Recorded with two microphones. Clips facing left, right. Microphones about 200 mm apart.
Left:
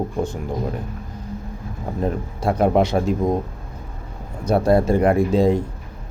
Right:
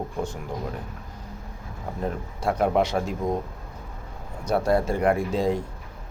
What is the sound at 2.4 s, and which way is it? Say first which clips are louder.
Speech: left 5 dB; 30° left (ahead or behind).